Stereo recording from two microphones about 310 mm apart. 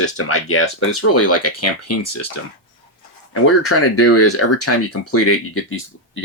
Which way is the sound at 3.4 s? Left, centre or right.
Left.